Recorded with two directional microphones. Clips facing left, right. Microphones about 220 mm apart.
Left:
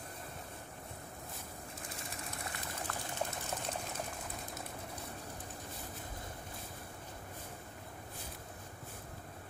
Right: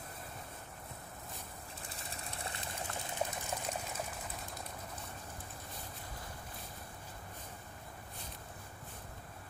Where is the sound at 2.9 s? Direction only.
25° right (ahead or behind).